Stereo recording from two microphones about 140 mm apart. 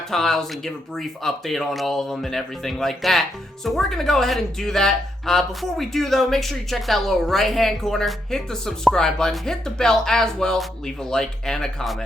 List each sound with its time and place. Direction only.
0.1 s speech: centre (ahead or behind)